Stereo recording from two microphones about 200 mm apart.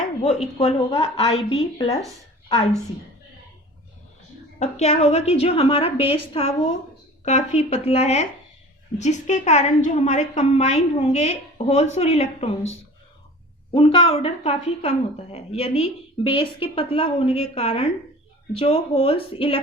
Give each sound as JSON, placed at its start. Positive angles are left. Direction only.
{"t": 0.6, "sound": "a woman's voice", "side_deg": 25}
{"t": 4.6, "sound": "a woman's voice", "side_deg": 30}
{"t": 13.7, "sound": "a woman's voice", "side_deg": 25}